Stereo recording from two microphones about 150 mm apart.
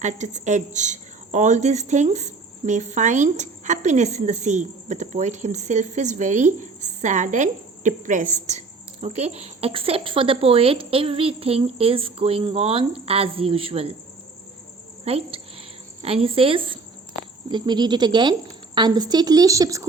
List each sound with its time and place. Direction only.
0.0 s speech: 55° right (ahead or behind)
15.0 s cricket: 40° right (ahead or behind)
16.0 s a woman's voice: 40° right (ahead or behind); by 19.9 s 20° right (ahead or behind)